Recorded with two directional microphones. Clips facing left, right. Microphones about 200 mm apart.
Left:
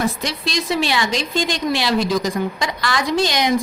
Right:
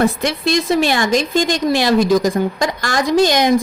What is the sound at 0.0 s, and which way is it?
A woman's voice, 55° right (ahead or behind).